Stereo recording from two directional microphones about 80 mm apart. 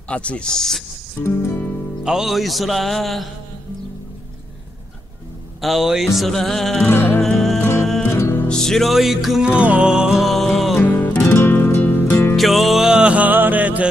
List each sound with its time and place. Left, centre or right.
0.1 s speech: centre
1.2 s music: left
2.0 s music: centre
5.6 s music: centre
6.9 s music: left
7.2 s music: centre
7.6 s music: left
8.5 s music: centre
9.5 s music: centre
10.3 s music: centre
10.8 s music: left
12.4 s music: centre